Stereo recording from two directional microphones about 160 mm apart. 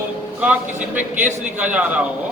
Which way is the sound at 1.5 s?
10° right (ahead or behind).